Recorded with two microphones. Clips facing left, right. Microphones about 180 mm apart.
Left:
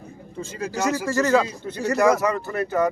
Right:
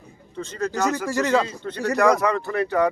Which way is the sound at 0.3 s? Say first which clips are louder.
Right 2 dB; 10° left (ahead or behind).